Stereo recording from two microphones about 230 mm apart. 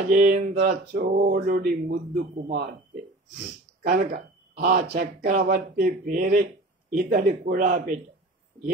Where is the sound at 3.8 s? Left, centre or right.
Right.